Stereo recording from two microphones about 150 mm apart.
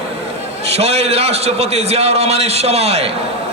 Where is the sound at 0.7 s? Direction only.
45° right (ahead or behind).